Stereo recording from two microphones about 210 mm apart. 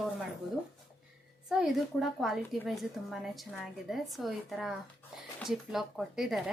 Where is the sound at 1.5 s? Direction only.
Centre (ahead or behind).